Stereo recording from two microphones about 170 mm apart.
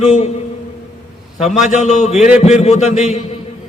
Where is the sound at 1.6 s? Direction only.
45° left (ahead or behind).